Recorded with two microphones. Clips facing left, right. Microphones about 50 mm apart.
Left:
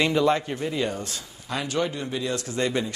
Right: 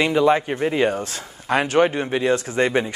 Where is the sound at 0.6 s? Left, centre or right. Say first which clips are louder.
Right 7 dB; right.